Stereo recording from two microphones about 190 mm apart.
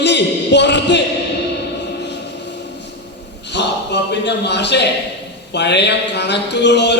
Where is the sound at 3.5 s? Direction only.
65° left (ahead or behind).